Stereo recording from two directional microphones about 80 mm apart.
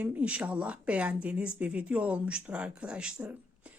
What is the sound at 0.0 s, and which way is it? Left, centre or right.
A woman's voice, centre.